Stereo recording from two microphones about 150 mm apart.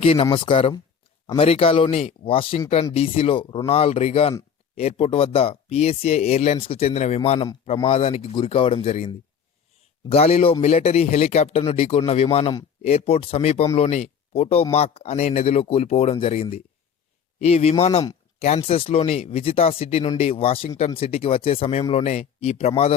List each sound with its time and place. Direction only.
0.0 s speech: 40° left (ahead or behind)